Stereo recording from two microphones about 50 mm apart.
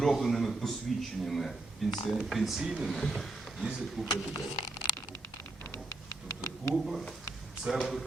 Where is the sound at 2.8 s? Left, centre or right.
Centre.